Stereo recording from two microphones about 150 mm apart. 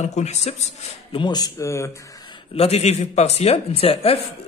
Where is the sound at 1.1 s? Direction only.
30° left (ahead or behind).